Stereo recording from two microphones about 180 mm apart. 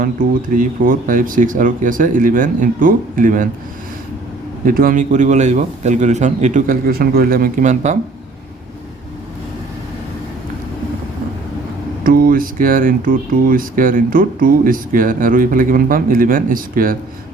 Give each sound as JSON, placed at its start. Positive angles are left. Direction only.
{"t": 0.0, "sound": "speech", "side_deg": -50}
{"t": 4.6, "sound": "speech", "side_deg": -50}
{"t": 12.0, "sound": "speech", "side_deg": -55}